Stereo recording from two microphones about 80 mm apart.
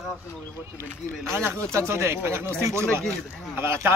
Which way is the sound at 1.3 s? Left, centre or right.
Right.